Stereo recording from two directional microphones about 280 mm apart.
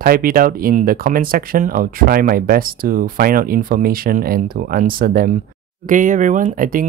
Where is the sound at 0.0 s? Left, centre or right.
Right.